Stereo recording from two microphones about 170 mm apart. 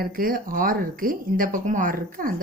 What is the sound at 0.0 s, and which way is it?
A woman's voice, 60° right (ahead or behind).